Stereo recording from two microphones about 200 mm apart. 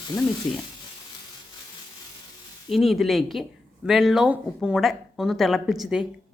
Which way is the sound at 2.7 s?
Centre (ahead or behind).